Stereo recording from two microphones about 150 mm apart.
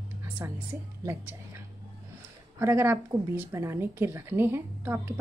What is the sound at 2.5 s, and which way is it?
A woman's voice, 20° right (ahead or behind).